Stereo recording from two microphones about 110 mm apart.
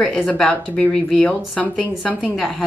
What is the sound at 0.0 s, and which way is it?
A woman's voice, centre (ahead or behind).